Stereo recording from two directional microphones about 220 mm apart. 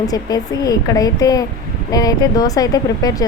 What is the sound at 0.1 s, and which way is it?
Speech, 15° left (ahead or behind).